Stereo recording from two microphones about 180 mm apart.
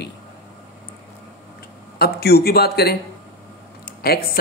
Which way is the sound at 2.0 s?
60° left (ahead or behind).